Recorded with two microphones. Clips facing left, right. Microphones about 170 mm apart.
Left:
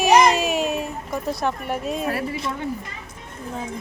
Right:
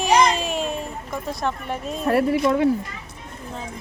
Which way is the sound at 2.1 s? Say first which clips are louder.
Right 8 dB; 60° right (ahead or behind).